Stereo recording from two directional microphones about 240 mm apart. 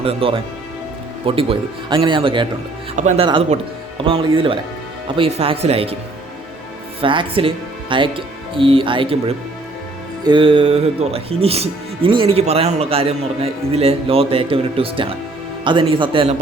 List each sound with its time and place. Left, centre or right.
0.0 s speech: right
2.9 s speech: right
7.0 s speech: right